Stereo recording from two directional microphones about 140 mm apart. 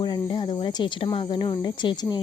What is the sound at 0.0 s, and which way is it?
Speech, 30° left (ahead or behind).